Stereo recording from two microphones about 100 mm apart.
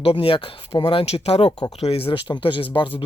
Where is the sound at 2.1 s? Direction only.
55° left (ahead or behind).